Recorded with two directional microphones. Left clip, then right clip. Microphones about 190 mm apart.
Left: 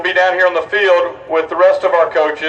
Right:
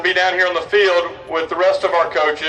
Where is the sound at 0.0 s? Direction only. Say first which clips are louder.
Left 3 dB; 50° left (ahead or behind).